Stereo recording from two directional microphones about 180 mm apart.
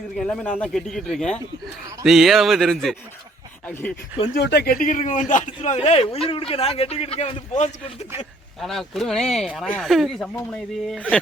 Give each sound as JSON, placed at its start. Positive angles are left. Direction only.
{"t": 0.2, "sound": "speech", "side_deg": 5}
{"t": 3.7, "sound": "speech", "side_deg": 10}
{"t": 4.3, "sound": "a man's voice", "side_deg": 65}
{"t": 8.6, "sound": "speech", "side_deg": 0}